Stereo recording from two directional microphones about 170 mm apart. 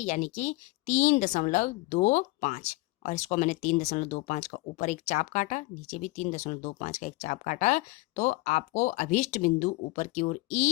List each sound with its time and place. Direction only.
0.0 s a woman's voice: 45° left (ahead or behind)